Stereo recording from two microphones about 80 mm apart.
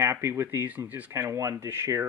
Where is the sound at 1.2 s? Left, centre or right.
Right.